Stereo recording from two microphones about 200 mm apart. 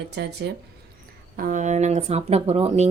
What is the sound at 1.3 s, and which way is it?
A woman's voice, 40° right (ahead or behind).